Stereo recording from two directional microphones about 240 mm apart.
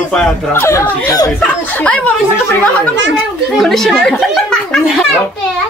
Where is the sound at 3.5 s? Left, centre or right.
Centre.